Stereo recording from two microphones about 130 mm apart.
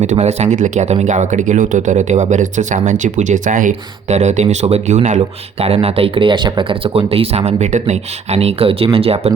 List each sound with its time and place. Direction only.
0.0 s speech: 60° right (ahead or behind)